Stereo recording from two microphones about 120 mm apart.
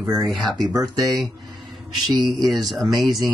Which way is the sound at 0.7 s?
30° right (ahead or behind).